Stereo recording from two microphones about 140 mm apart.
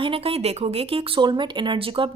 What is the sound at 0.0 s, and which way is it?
A woman's voice, 40° right (ahead or behind).